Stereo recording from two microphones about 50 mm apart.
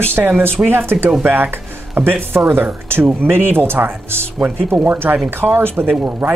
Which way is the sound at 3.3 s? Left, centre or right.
Right.